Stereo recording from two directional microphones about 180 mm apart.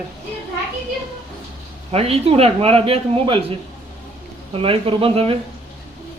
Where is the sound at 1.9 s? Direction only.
35° right (ahead or behind).